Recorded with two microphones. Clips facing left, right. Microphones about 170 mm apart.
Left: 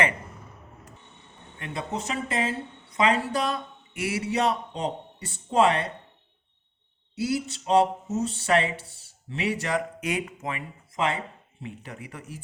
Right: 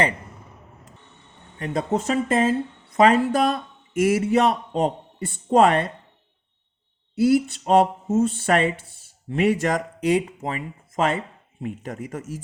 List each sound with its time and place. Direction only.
1.5 s speech: 40° right (ahead or behind)
7.2 s speech: 55° right (ahead or behind)
10.0 s speech: 30° right (ahead or behind)